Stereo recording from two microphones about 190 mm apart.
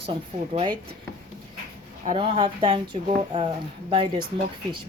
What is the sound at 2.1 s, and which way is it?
Speech, 25° right (ahead or behind).